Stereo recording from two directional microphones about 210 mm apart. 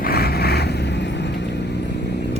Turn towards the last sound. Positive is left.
turn(degrees=55)  # may be behind; listen again after turning